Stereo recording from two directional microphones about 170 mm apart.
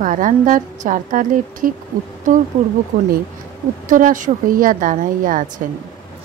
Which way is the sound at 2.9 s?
60° right (ahead or behind).